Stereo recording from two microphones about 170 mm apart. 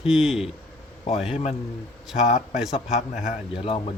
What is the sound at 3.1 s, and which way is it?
Speech, 45° left (ahead or behind).